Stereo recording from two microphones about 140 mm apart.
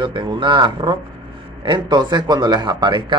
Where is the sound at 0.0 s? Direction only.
35° right (ahead or behind).